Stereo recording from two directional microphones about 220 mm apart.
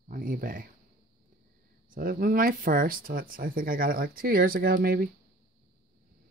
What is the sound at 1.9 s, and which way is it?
Speech, 40° right (ahead or behind).